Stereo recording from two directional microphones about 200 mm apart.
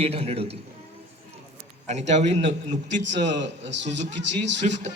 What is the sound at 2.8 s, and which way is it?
Speech, 65° right (ahead or behind).